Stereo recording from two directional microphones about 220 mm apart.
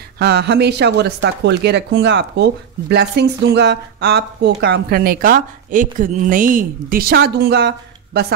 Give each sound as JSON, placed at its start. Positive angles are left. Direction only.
{"t": 0.2, "sound": "a woman's voice", "side_deg": -50}